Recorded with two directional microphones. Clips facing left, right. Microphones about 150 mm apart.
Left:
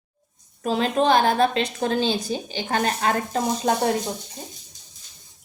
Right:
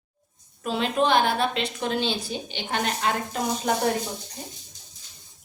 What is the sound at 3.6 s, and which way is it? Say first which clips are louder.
Speech: left 3 dB; 30° left (ahead or behind).